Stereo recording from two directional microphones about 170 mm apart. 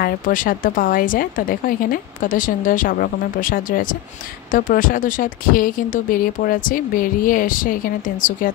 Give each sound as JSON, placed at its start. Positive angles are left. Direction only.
{"t": 0.0, "sound": "speech", "side_deg": 55}
{"t": 4.5, "sound": "speech", "side_deg": 50}